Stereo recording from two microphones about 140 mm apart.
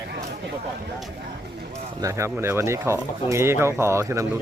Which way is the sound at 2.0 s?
20° right (ahead or behind).